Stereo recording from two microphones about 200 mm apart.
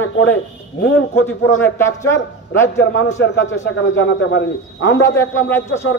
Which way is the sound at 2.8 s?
60° left (ahead or behind).